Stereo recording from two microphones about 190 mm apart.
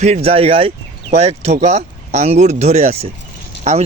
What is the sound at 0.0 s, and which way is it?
Speech, 30° right (ahead or behind).